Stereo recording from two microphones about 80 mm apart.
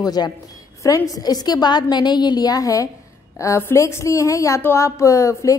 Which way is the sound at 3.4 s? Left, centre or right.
Left.